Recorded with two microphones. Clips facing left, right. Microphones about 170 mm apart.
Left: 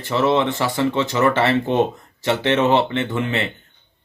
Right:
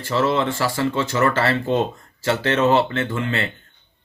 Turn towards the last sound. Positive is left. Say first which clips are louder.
# left 1 dB
turn(degrees=20)  # may be behind; listen again after turning